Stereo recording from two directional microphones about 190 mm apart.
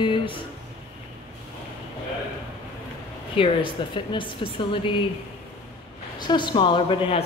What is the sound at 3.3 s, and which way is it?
A woman's voice, 25° left (ahead or behind).